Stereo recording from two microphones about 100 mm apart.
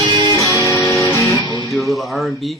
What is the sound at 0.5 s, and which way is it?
Music, 30° left (ahead or behind).